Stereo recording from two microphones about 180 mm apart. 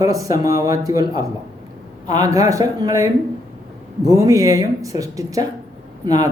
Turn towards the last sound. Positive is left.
turn(degrees=-20)  # may be behind; listen again after turning